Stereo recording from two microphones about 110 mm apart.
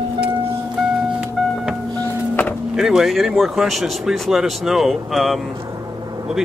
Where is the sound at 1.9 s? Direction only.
15° left (ahead or behind).